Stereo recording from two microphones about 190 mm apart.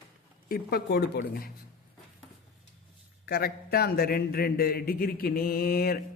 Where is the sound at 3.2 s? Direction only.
55° left (ahead or behind).